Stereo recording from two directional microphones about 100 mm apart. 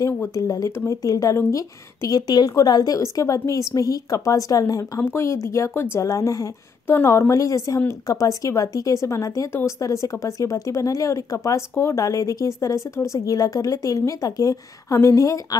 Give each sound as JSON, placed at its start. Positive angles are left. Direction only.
{"t": 0.0, "sound": "speech", "side_deg": 35}